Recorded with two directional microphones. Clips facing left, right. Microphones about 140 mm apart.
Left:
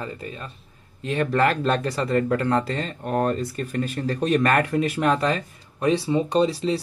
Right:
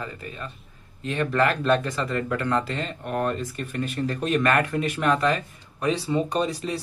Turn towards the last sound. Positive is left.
turn(degrees=30)  # may be behind; listen again after turning